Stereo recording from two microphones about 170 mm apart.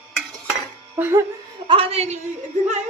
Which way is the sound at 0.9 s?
10° right (ahead or behind).